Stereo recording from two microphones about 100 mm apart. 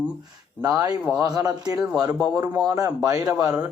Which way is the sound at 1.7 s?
10° right (ahead or behind).